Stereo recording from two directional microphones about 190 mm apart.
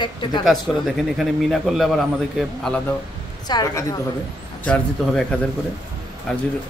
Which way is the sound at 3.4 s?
20° left (ahead or behind).